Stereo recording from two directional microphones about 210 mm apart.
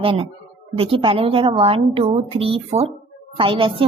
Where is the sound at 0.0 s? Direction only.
25° right (ahead or behind).